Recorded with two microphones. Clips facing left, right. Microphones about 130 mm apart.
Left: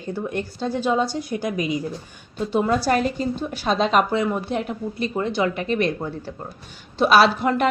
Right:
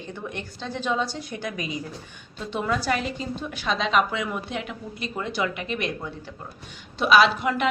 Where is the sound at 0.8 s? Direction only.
35° left (ahead or behind).